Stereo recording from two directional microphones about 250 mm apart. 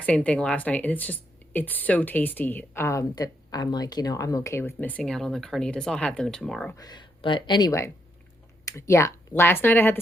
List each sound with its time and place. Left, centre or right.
0.0 s speech: centre
6.7 s speech: centre